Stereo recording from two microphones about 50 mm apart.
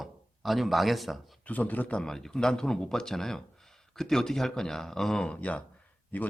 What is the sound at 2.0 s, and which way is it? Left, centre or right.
Speech, centre.